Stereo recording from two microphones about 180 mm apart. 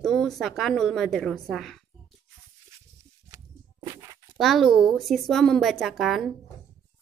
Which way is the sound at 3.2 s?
20° right (ahead or behind).